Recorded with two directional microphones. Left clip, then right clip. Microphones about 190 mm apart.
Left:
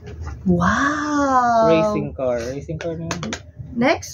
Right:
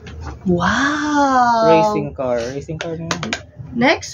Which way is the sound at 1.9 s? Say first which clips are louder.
Right 2 dB; 20° right (ahead or behind).